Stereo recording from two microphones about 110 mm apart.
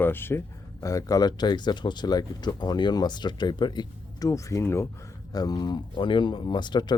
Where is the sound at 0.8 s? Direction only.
30° left (ahead or behind).